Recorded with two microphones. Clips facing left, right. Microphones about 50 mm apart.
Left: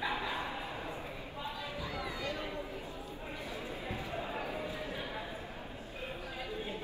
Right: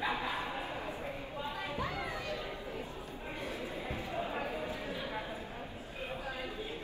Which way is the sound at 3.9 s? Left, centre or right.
Right.